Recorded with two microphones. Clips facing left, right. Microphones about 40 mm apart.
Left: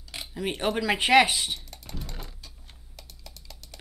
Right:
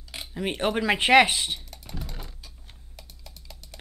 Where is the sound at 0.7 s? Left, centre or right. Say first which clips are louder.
Right 2 dB; right.